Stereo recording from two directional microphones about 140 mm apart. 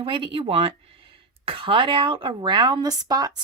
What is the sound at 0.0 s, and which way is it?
Speech, 40° right (ahead or behind).